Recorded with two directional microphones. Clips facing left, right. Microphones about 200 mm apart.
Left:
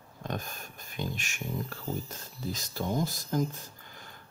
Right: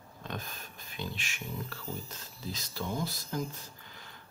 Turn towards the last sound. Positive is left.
turn(degrees=45)  # may be behind; listen again after turning